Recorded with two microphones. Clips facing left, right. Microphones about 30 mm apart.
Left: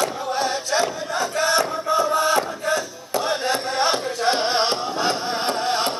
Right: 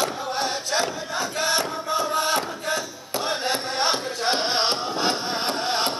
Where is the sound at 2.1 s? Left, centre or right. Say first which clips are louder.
Left 4 dB; right.